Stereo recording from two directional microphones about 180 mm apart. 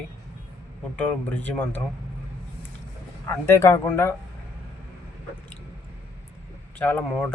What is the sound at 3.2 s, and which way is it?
Speech, 15° left (ahead or behind).